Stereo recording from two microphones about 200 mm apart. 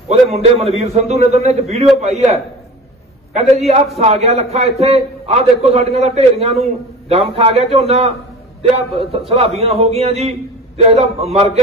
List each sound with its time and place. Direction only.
0.1 s a man's voice: 30° right (ahead or behind)
3.3 s a man's voice: 30° right (ahead or behind)